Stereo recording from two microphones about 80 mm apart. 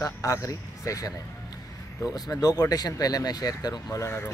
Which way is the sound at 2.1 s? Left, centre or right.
Left.